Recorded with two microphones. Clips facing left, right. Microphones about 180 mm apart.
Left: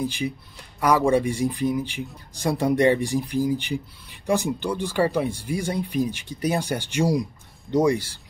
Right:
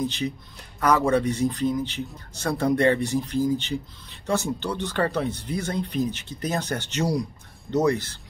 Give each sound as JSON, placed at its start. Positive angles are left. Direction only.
{"t": 0.0, "sound": "a man's voice", "side_deg": 10}